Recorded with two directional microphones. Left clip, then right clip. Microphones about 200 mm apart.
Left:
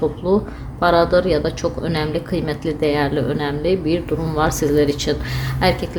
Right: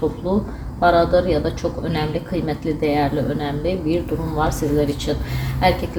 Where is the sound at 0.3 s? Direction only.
45° left (ahead or behind).